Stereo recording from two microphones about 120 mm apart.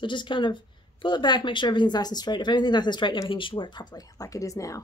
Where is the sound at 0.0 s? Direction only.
40° left (ahead or behind).